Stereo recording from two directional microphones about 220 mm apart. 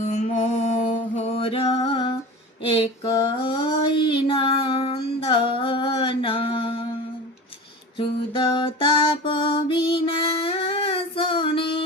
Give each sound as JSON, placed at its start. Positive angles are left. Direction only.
{"t": 0.0, "sound": "mantra", "side_deg": 35}
{"t": 2.6, "sound": "female singing", "side_deg": 25}
{"t": 7.9, "sound": "music", "side_deg": 25}